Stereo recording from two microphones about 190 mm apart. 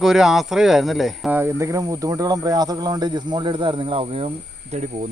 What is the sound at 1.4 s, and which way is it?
Speech, 15° right (ahead or behind).